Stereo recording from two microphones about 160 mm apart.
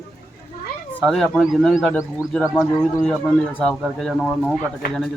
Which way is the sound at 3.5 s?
Centre (ahead or behind).